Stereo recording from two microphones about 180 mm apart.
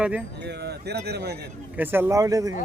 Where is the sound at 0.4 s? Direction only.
65° right (ahead or behind).